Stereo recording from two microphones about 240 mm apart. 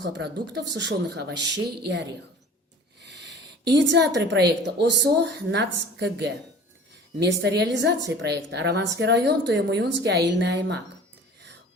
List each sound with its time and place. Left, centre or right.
0.1 s a woman's voice: right
3.1 s a sound: right
3.8 s a woman's voice: right